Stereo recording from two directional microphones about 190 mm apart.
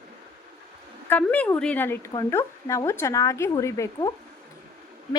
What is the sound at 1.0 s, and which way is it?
Speech, 10° left (ahead or behind).